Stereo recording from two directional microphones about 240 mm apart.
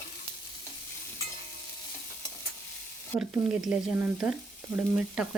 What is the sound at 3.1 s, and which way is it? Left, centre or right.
Speech, centre.